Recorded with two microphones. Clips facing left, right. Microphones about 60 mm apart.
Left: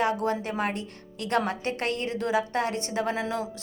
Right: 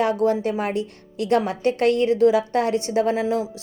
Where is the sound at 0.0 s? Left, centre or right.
Left.